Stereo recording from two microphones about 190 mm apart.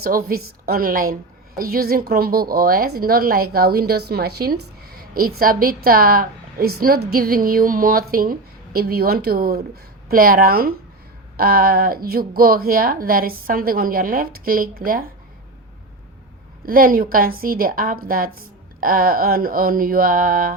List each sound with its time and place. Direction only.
0.0 s a woman's voice: 50° right (ahead or behind)
16.6 s a woman's voice: 50° right (ahead or behind)